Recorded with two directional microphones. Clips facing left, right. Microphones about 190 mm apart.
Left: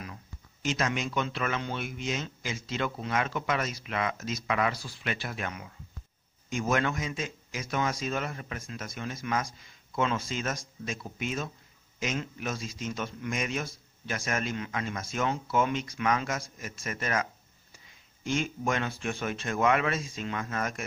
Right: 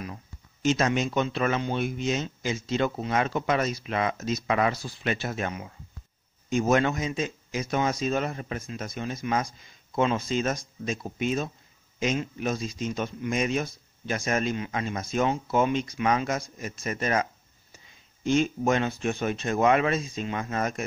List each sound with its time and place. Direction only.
0.0 s a sound: 25° right (ahead or behind)
1.6 s speech: 25° right (ahead or behind)
6.7 s speech: 25° right (ahead or behind)